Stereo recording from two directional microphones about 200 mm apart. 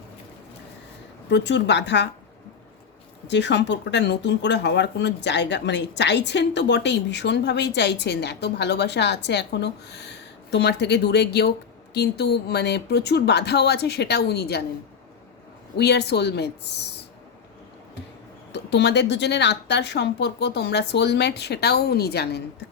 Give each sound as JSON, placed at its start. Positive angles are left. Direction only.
{"t": 1.3, "sound": "speech", "side_deg": 60}
{"t": 3.2, "sound": "speech", "side_deg": 60}
{"t": 15.8, "sound": "speech", "side_deg": 55}
{"t": 18.5, "sound": "speech", "side_deg": 60}